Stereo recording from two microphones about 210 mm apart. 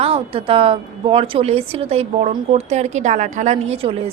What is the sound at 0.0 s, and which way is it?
A woman's voice, 25° right (ahead or behind).